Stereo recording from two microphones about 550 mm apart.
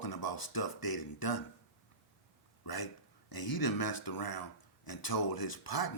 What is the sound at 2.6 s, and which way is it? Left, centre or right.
Speech, left.